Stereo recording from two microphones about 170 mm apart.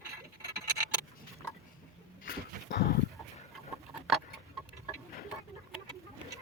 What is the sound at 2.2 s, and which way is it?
Dog, 60° left (ahead or behind).